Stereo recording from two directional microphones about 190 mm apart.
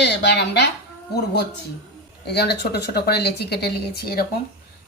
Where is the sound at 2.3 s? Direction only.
60° left (ahead or behind).